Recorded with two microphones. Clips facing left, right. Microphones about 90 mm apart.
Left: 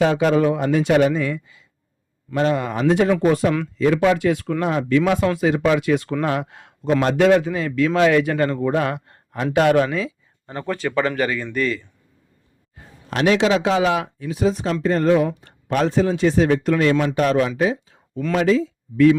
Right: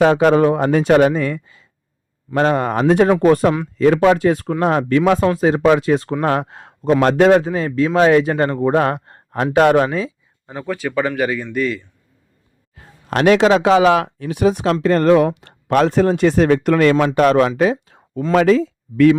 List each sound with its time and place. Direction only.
0.0 s a man's voice: 50° right (ahead or behind); by 10.2 s 35° right (ahead or behind)
10.4 s speech: 5° right (ahead or behind)
13.1 s a man's voice: 50° right (ahead or behind)
13.7 s speech: 70° right (ahead or behind)
17.6 s a sound: 60° right (ahead or behind)
18.3 s speech: 60° right (ahead or behind)